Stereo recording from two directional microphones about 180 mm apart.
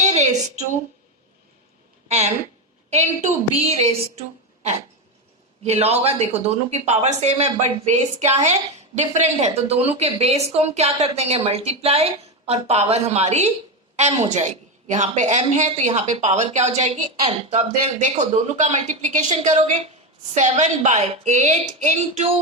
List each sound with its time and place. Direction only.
0.0 s a sound: 40° right (ahead or behind)
2.0 s a woman's voice: 35° right (ahead or behind)
5.6 s a woman's voice: 35° right (ahead or behind)